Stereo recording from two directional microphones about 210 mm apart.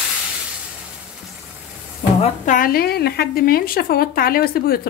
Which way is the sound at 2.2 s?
40° left (ahead or behind).